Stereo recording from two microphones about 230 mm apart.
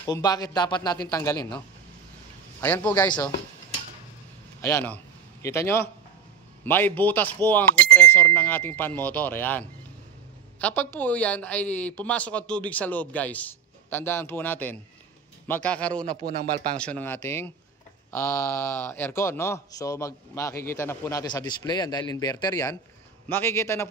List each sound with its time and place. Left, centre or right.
0.0 s speech: centre
2.6 s speech: centre
4.6 s a man's voice: centre